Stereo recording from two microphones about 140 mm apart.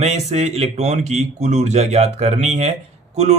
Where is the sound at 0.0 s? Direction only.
50° right (ahead or behind).